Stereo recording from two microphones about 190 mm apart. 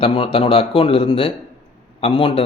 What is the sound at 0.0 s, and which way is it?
Speech, 30° left (ahead or behind).